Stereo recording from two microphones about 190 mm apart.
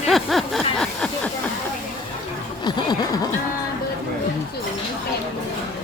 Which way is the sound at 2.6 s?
20° left (ahead or behind).